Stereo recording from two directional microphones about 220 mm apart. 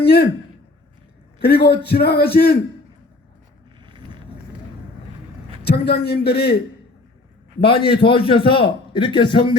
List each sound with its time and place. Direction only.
0.0 s a man's voice: 45° left (ahead or behind)
1.4 s a man's voice: 45° left (ahead or behind)
3.8 s vehicle: 20° right (ahead or behind)
5.6 s a man's voice: 45° left (ahead or behind)
7.7 s a man's voice: 25° left (ahead or behind)